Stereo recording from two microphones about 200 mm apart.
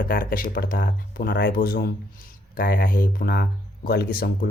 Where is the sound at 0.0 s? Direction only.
45° left (ahead or behind).